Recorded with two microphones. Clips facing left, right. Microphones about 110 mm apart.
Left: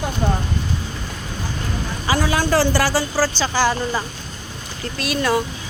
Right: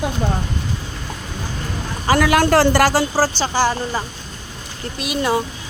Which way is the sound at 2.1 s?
60° right (ahead or behind).